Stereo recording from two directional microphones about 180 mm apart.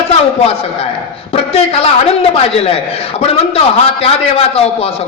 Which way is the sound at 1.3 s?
35° left (ahead or behind).